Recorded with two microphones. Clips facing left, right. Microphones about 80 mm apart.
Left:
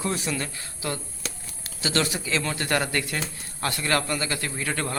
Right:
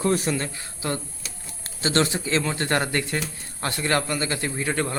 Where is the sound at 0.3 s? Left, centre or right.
Right.